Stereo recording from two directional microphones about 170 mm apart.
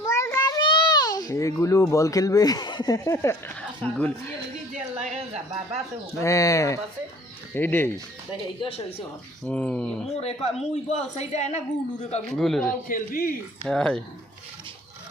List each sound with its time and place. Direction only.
0.1 s a child's voice: 20° left (ahead or behind)
6.2 s speech: 20° left (ahead or behind)
8.6 s speech: 35° left (ahead or behind)
9.5 s speech: 5° left (ahead or behind)
10.2 s speech: 35° left (ahead or behind)
12.3 s a man's voice: centre (ahead or behind)
12.9 s speech: 55° left (ahead or behind)
13.7 s a man's voice: 5° left (ahead or behind)